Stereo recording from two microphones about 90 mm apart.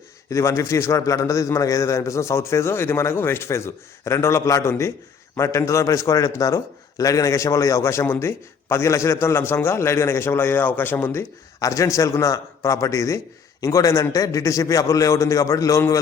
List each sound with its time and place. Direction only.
0.3 s a man's voice: 35° left (ahead or behind)